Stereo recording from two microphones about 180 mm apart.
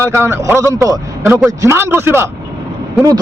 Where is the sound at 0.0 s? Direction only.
15° right (ahead or behind).